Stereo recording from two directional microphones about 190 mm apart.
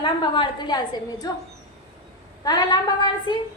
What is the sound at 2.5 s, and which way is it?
Speech, 20° left (ahead or behind).